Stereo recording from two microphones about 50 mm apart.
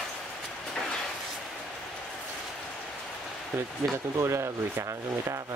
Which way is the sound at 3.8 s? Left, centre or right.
Right.